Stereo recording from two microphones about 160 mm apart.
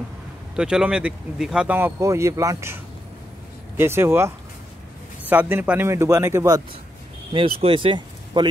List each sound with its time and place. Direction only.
0.6 s speech: 5° right (ahead or behind)
5.3 s speech: 10° right (ahead or behind)
7.6 s speech: 30° right (ahead or behind)